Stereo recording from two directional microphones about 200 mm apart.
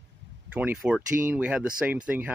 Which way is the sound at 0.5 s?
5° right (ahead or behind).